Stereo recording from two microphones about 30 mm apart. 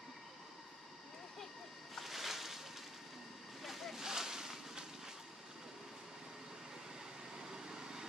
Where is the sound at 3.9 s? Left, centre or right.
Centre.